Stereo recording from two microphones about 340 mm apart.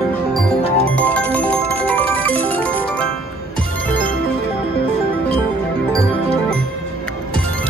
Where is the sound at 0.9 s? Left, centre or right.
Centre.